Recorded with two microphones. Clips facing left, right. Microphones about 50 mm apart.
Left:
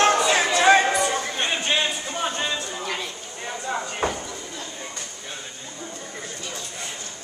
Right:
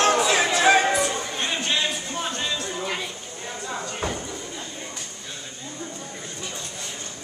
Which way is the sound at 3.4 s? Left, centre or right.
Centre.